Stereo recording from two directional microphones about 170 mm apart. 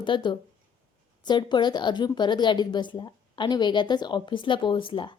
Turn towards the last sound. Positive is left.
turn(degrees=30)  # may be behind; listen again after turning